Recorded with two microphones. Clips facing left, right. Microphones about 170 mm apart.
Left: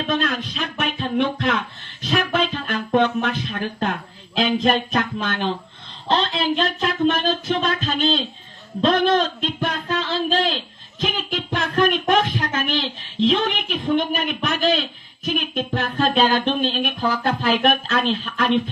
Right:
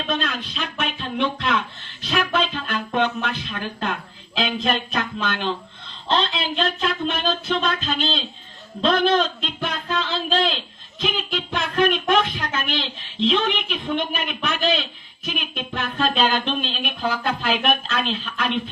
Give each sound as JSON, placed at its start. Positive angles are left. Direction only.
{"t": 0.0, "sound": "a man's voice", "side_deg": 45}
{"t": 9.9, "sound": "a sound", "side_deg": 45}
{"t": 11.8, "sound": "a man's voice", "side_deg": 45}